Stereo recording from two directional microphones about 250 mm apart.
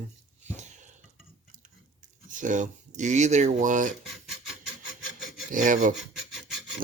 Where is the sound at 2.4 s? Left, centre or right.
Right.